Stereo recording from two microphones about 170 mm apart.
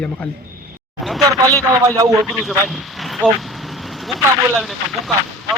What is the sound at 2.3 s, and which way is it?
Speech, centre (ahead or behind).